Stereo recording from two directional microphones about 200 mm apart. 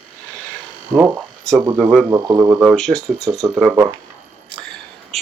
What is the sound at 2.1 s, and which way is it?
Speech, 15° right (ahead or behind).